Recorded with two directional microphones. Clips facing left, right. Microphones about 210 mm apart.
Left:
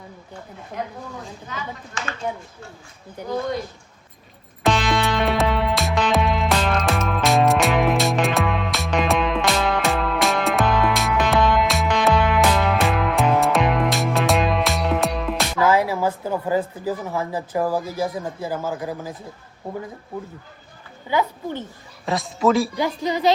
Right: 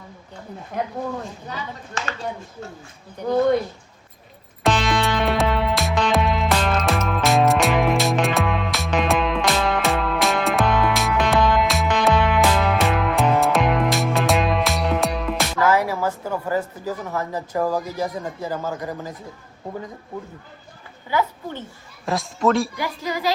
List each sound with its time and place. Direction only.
1.5 s speech: 35° right (ahead or behind)
4.6 s music: centre (ahead or behind)
15.5 s a woman's voice: 10° left (ahead or behind)
21.1 s a woman's voice: 15° left (ahead or behind)
22.0 s a man's voice: centre (ahead or behind)
22.8 s speech: 20° left (ahead or behind)